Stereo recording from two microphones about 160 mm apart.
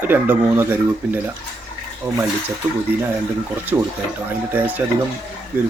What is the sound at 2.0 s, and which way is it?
Speech, 25° right (ahead or behind).